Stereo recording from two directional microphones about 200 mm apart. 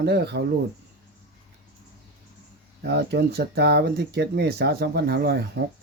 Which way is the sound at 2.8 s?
55° right (ahead or behind).